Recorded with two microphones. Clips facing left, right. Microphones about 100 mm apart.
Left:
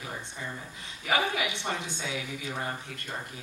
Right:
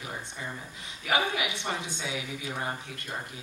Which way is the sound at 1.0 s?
20° right (ahead or behind).